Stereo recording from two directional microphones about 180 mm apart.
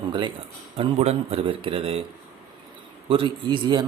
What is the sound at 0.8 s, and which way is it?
Speech, 35° right (ahead or behind).